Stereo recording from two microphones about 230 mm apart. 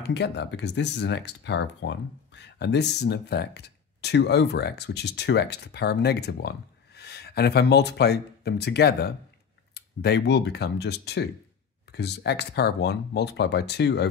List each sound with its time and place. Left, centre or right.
0.0 s speech: left